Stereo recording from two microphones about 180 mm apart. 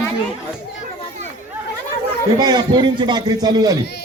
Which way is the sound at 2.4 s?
25° right (ahead or behind).